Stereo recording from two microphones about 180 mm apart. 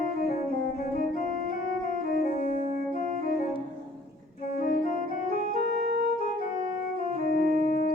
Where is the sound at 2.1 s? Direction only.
50° left (ahead or behind).